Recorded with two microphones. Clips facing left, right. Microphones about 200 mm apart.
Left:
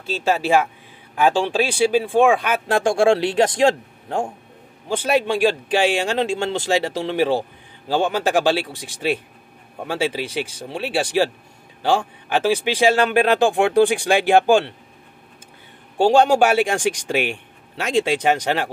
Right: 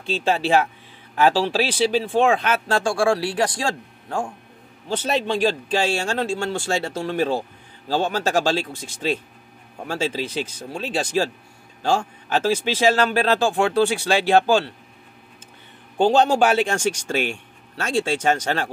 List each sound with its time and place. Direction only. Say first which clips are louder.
0.2 s speech: left 2 dB; 10° left (ahead or behind)
1.8 s speech: left 4 dB; 10° left (ahead or behind)
12.3 s speech: left 2 dB; 15° left (ahead or behind)
16.0 s speech: left 2 dB; 10° left (ahead or behind)